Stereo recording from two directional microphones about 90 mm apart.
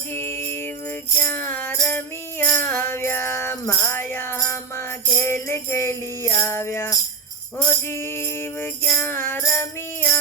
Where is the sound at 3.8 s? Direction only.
25° left (ahead or behind).